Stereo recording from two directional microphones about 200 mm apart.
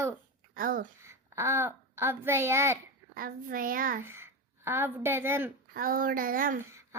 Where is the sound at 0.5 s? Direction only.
45° right (ahead or behind).